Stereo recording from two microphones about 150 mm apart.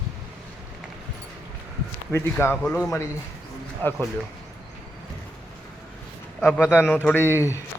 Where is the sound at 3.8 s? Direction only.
15° left (ahead or behind).